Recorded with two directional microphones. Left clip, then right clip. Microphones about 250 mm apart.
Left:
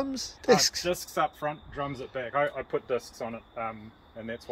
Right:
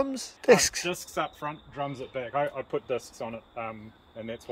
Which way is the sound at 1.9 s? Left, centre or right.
Right.